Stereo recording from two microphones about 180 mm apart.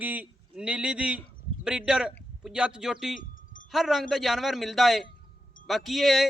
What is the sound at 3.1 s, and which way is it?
Wind chime, 50° left (ahead or behind).